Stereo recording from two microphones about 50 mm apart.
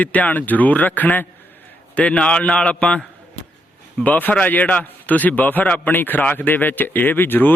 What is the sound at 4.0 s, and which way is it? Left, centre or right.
Speech, left.